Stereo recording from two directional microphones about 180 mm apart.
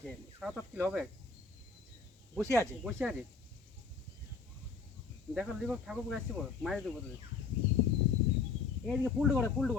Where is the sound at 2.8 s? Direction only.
Centre (ahead or behind).